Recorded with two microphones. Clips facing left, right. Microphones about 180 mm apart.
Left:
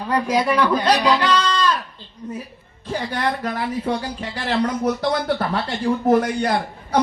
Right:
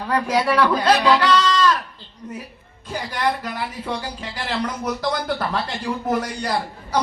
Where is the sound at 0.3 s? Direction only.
15° left (ahead or behind).